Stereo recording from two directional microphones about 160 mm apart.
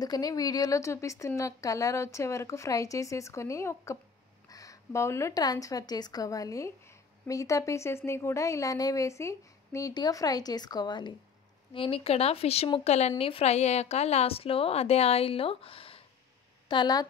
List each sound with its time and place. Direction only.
0.0 s a woman's voice: 25° left (ahead or behind)